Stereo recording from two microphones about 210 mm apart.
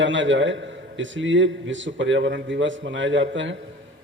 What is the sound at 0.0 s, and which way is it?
A man's voice, 60° right (ahead or behind).